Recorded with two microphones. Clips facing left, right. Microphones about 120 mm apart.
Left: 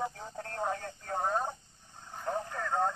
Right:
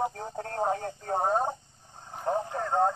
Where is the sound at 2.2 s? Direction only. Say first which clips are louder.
Right 6 dB; 30° right (ahead or behind).